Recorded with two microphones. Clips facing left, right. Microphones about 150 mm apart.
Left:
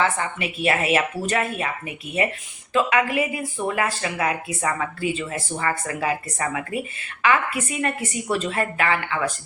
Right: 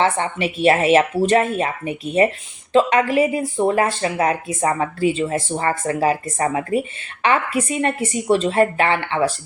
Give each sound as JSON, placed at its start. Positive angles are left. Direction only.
{"t": 0.0, "sound": "speech", "side_deg": -30}